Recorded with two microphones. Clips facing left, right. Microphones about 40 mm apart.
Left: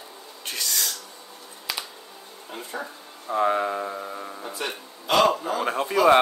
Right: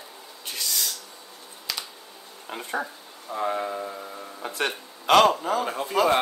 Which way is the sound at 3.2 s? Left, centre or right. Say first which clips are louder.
Left 5 dB; left.